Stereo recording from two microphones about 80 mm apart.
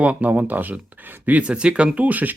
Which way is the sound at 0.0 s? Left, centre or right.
Centre.